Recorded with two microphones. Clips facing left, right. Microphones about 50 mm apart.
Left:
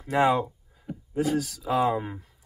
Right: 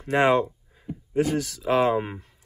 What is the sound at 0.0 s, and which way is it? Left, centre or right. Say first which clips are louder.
Speech: right 2 dB; right.